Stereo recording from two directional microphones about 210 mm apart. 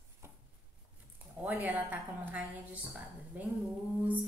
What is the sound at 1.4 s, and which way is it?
A woman's voice, 10° right (ahead or behind).